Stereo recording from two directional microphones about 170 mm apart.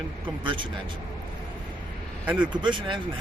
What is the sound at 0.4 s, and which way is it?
Speech, 30° right (ahead or behind).